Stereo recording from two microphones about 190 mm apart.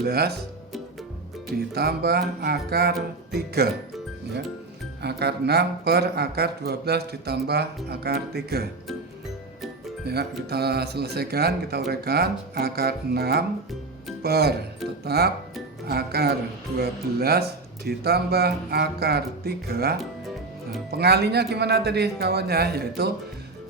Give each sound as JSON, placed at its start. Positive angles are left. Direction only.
{"t": 0.0, "sound": "speech", "side_deg": -55}
{"t": 1.5, "sound": "speech", "side_deg": -55}
{"t": 5.0, "sound": "speech", "side_deg": -60}
{"t": 10.1, "sound": "speech", "side_deg": -55}